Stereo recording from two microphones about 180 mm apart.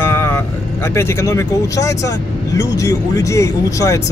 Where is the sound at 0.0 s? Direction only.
15° left (ahead or behind).